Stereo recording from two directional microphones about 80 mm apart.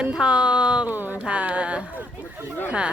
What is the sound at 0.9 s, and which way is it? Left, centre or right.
Speech, right.